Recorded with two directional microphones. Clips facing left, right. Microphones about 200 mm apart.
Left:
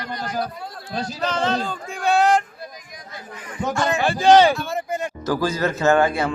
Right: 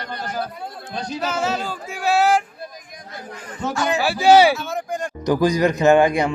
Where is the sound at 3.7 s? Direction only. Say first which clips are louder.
Even; 5° right (ahead or behind).